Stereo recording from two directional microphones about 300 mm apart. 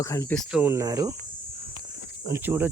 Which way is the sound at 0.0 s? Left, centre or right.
Centre.